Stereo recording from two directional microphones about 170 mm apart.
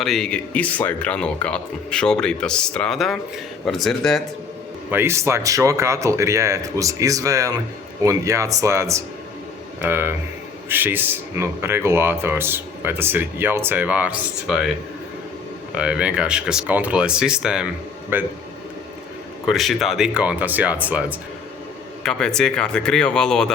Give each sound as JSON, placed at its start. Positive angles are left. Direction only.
{"t": 0.0, "sound": "speech", "side_deg": 0}
{"t": 4.9, "sound": "speech", "side_deg": -15}
{"t": 15.7, "sound": "speech", "side_deg": -5}
{"t": 19.5, "sound": "speech", "side_deg": 0}
{"t": 22.0, "sound": "speech", "side_deg": 5}